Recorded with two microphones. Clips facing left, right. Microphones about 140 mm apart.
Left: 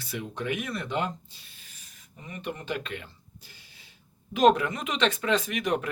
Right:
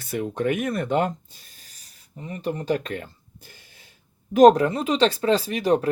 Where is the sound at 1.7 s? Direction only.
35° right (ahead or behind).